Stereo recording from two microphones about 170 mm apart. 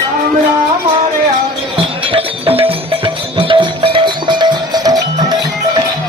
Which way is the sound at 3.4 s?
30° right (ahead or behind).